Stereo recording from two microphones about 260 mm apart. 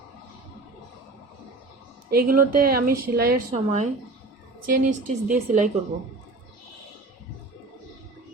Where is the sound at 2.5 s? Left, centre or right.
Right.